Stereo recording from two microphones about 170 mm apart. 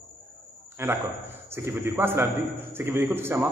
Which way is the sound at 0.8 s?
15° right (ahead or behind).